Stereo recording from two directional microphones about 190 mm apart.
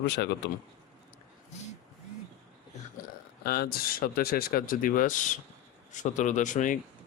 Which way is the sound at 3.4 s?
55° left (ahead or behind).